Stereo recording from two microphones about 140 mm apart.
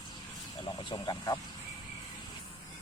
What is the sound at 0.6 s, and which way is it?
Speech, 35° left (ahead or behind).